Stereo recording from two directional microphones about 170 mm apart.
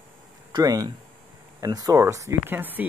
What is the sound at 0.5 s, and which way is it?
Speech, 20° right (ahead or behind).